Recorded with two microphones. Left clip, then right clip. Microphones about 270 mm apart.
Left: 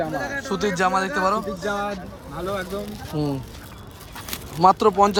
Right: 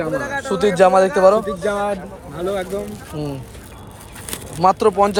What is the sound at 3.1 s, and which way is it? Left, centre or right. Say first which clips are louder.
Speech: left 1 dB; centre.